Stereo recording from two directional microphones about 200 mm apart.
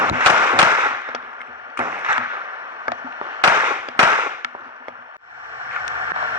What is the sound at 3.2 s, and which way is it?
Fireworks, 20° right (ahead or behind).